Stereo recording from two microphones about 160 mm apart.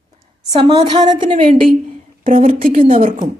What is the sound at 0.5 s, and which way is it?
Speech, 30° right (ahead or behind).